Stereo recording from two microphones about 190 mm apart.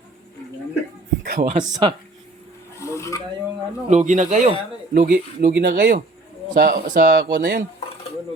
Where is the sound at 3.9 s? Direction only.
40° right (ahead or behind).